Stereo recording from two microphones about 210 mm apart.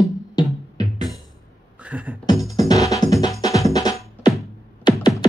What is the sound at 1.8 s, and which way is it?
Beatboxing, 5° right (ahead or behind).